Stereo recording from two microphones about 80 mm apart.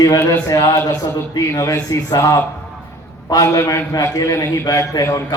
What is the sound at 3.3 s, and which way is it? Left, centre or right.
A man's voice, left.